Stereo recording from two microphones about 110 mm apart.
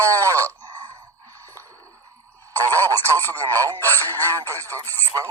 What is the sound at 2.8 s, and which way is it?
Radio, 20° left (ahead or behind).